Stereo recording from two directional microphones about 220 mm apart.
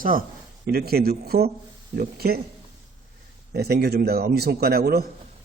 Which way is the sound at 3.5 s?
45° right (ahead or behind).